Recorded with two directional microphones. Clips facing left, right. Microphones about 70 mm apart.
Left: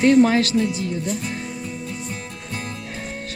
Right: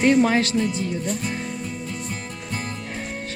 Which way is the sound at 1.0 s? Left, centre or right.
Centre.